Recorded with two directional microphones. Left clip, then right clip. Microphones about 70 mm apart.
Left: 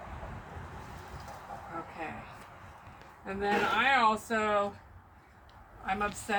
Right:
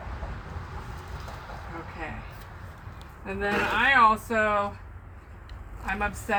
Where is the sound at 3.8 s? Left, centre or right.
Centre.